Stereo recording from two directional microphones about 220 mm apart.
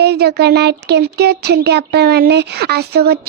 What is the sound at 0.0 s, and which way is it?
Speech, 45° right (ahead or behind).